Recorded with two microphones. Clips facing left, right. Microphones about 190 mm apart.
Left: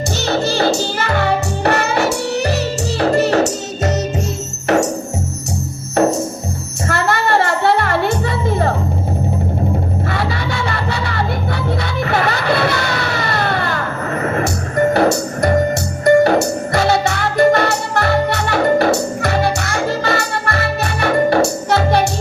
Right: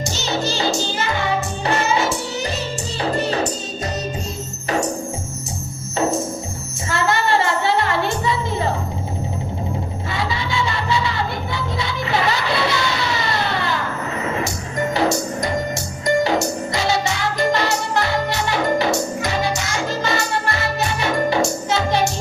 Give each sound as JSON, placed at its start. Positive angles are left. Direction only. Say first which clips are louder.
{"t": 0.2, "sound": "music", "louder": "left 6 dB", "side_deg": 60}
{"t": 6.0, "sound": "music", "louder": "left 5 dB", "side_deg": 70}
{"t": 10.1, "sound": "music", "louder": "left 3 dB", "side_deg": 60}